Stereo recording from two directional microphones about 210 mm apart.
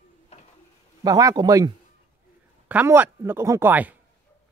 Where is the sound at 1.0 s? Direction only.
15° right (ahead or behind).